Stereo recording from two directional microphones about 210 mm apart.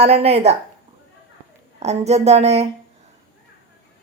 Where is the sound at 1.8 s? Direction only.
30° right (ahead or behind).